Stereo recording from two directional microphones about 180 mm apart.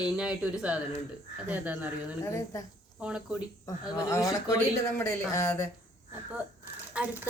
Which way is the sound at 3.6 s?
20° left (ahead or behind).